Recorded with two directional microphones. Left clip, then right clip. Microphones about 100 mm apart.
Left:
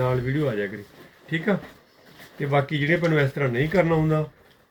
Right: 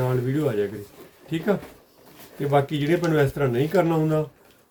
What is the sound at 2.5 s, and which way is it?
Speech, 40° right (ahead or behind).